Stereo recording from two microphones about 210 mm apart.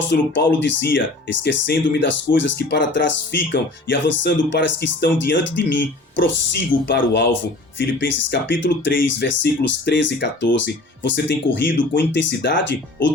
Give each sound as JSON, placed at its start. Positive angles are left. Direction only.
{"t": 0.1, "sound": "speech", "side_deg": 60}